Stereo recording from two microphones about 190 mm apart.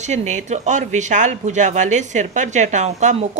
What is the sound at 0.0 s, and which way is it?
Speech, 40° right (ahead or behind).